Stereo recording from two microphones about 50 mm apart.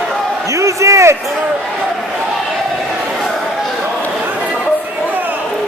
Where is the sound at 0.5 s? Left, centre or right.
Right.